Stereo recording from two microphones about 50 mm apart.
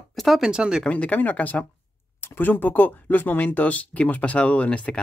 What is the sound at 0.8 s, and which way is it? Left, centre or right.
Speech, left.